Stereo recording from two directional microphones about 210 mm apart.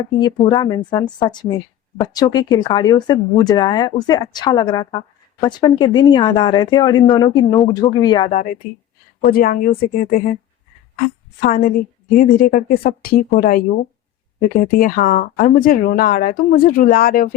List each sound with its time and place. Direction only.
0.2 s speech: 20° left (ahead or behind)
8.3 s a woman's voice: 40° left (ahead or behind)